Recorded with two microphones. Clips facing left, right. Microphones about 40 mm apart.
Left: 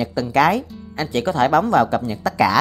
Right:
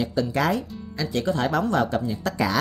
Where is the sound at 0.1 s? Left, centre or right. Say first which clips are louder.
Left 6 dB; left.